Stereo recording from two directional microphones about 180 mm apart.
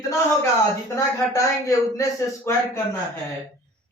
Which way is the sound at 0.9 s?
20° left (ahead or behind).